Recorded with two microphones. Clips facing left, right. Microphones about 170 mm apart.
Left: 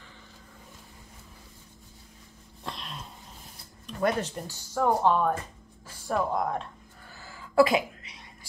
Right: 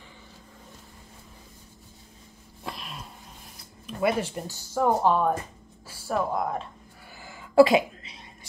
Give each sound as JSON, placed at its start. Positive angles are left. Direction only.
{"t": 2.6, "sound": "sneeze", "side_deg": -5}
{"t": 3.8, "sound": "speech", "side_deg": -5}
{"t": 7.2, "sound": "throat clearing", "side_deg": -20}